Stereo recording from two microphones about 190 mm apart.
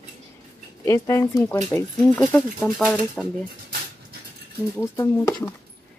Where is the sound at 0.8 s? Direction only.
15° left (ahead or behind).